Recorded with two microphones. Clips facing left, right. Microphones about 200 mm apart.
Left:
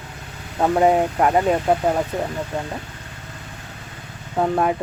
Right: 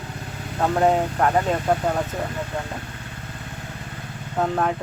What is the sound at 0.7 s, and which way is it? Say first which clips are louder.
Speech: left 3 dB; 10° left (ahead or behind).